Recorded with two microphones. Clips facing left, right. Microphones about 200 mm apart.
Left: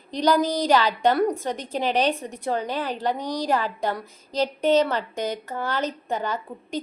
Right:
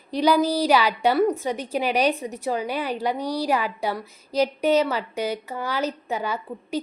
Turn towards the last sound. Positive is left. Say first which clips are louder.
# right 1 dB
turn(degrees=-10)  # may be behind; listen again after turning